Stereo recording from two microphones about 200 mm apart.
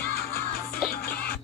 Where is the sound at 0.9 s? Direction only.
50° left (ahead or behind).